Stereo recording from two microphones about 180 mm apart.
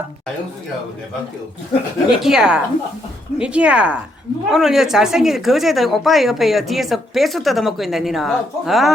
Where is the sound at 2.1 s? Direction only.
Centre (ahead or behind).